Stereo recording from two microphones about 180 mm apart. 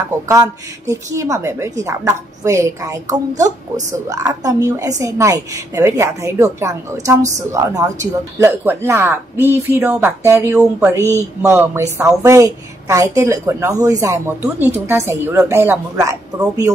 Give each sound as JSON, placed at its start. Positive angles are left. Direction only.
{"t": 0.3, "sound": "speech", "side_deg": -15}